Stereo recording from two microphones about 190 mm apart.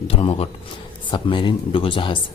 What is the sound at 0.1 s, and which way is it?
Speech, 30° left (ahead or behind).